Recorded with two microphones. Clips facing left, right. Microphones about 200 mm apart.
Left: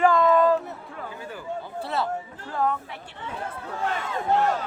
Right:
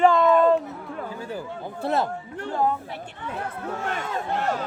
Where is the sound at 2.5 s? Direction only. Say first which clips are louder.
Right 1 dB; 30° right (ahead or behind).